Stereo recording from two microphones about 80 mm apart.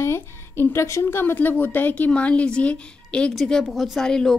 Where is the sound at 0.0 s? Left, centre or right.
Left.